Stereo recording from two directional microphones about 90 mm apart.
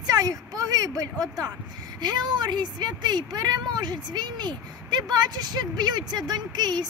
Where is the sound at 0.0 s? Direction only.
45° right (ahead or behind).